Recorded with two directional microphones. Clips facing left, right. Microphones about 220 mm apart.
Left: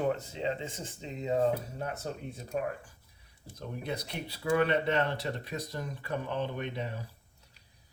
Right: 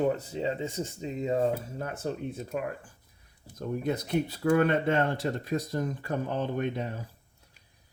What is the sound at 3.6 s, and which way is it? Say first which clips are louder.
Speech: right 7 dB; 50° right (ahead or behind).